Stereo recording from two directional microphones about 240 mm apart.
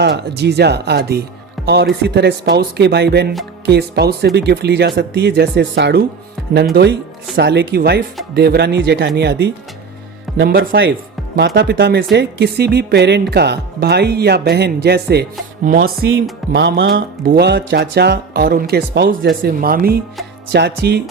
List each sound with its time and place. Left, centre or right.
0.0 s speech: right
7.3 s speech: right
16.5 s speech: right